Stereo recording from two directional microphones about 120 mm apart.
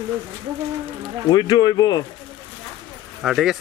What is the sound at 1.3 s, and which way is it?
Speech, 35° left (ahead or behind).